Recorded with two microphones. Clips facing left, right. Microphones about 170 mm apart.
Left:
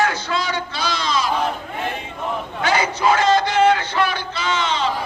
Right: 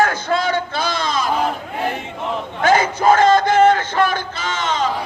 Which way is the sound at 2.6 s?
50° right (ahead or behind).